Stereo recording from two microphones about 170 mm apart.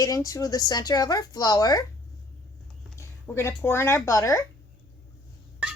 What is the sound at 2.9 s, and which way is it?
Speech, 15° left (ahead or behind).